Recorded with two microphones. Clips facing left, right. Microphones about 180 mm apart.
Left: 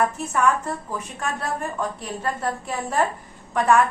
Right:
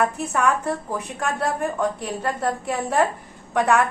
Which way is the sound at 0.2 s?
60° right (ahead or behind).